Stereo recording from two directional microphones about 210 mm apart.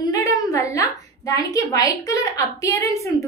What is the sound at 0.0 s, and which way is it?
A woman's voice, 15° left (ahead or behind).